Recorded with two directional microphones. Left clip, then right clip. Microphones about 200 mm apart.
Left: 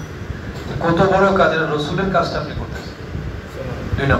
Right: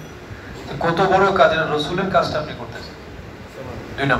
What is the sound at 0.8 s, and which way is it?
A man's voice, 40° right (ahead or behind).